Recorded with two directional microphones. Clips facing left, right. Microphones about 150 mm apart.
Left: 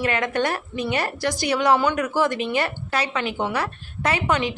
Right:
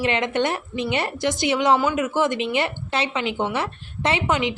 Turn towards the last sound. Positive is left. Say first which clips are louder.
# right 1 dB
turn(degrees=-20)  # may be behind; listen again after turning